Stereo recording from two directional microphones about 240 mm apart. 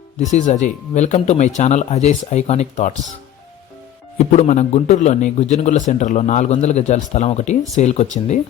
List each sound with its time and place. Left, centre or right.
0.2 s a man's voice: left
4.2 s a man's voice: left